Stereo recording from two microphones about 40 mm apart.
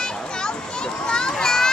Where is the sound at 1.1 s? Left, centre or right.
Centre.